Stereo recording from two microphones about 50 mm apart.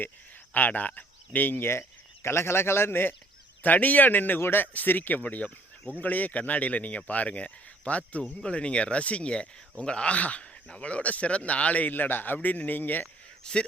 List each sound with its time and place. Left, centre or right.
0.5 s speech: left
3.6 s speech: left
13.4 s speech: centre